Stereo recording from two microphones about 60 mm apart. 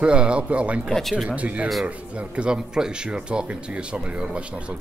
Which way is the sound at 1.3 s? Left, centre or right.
Right.